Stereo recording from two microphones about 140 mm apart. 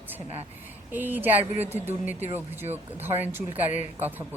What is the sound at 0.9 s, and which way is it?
Speech, 15° right (ahead or behind).